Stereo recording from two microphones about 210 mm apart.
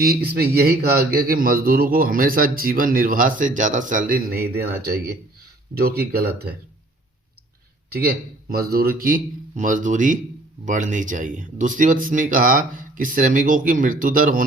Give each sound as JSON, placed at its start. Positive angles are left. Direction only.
{"t": 0.0, "sound": "a man's voice", "side_deg": -45}
{"t": 7.9, "sound": "a man's voice", "side_deg": -45}